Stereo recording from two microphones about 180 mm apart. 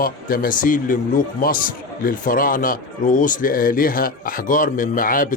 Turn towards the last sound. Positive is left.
turn(degrees=50)  # may be behind; listen again after turning